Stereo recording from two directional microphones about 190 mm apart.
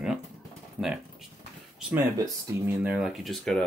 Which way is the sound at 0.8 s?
5° right (ahead or behind).